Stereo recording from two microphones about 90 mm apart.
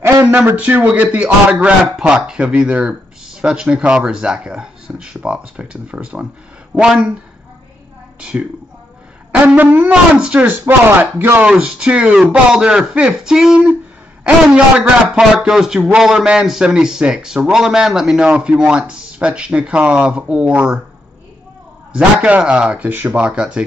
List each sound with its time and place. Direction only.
0.0 s a sound: 25° right (ahead or behind)
0.6 s a man's voice: 15° right (ahead or behind)
8.2 s a man's voice: 10° right (ahead or behind)
9.6 s a man's voice: 20° right (ahead or behind)
11.5 s a man's voice: 10° right (ahead or behind)
21.9 s a man's voice: 10° right (ahead or behind)